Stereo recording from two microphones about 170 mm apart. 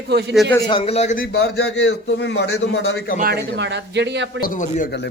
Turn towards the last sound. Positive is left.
turn(degrees=50)  # may be behind; listen again after turning